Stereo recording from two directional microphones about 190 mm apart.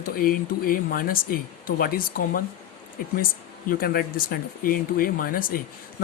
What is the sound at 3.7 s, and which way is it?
Speech, 50° left (ahead or behind).